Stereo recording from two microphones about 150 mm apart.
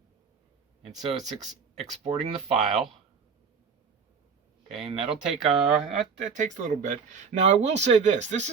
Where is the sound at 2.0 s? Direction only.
45° right (ahead or behind).